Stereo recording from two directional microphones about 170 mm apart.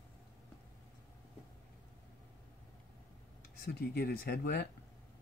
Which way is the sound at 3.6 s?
70° left (ahead or behind).